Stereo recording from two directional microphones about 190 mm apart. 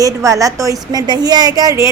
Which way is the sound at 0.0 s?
15° right (ahead or behind).